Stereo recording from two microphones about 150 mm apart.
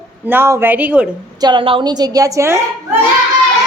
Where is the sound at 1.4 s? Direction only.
30° right (ahead or behind).